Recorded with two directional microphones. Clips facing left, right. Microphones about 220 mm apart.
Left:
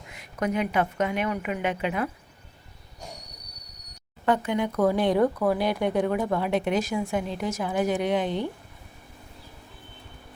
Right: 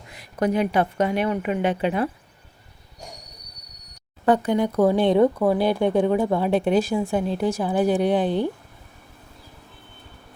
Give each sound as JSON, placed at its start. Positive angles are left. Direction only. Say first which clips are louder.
{"t": 0.1, "sound": "speech", "louder": "right 5 dB", "side_deg": -35}
{"t": 4.3, "sound": "speech", "louder": "right 5 dB", "side_deg": -35}